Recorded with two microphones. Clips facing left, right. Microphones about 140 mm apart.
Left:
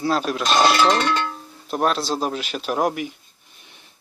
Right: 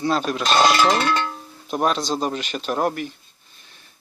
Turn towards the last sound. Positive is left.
turn(degrees=20)  # may be behind; listen again after turning